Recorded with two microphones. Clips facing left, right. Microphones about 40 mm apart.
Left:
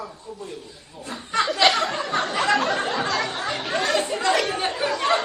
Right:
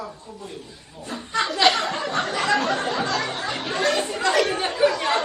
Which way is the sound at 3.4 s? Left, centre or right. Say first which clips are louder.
Right 1 dB; centre.